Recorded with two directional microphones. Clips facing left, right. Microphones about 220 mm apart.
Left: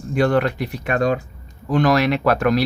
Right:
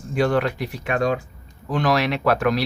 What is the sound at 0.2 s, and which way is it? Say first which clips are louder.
Speech: left 2 dB; 50° left (ahead or behind).